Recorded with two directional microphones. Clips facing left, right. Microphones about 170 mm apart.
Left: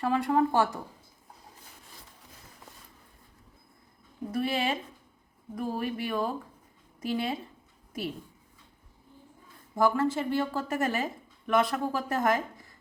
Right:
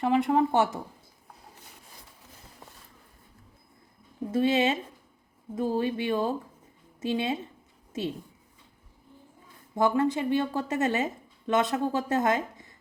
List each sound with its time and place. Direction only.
0.0 s a woman's voice: 20° right (ahead or behind)
4.3 s a woman's voice: 25° right (ahead or behind)
9.7 s a woman's voice: 20° right (ahead or behind)